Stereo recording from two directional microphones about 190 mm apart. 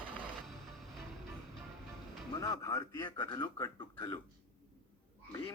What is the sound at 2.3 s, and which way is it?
Speech, 15° left (ahead or behind).